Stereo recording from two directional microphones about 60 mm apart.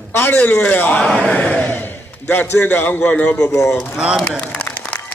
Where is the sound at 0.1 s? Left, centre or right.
Left.